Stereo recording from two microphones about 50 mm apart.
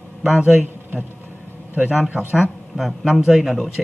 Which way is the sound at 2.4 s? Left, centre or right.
Centre.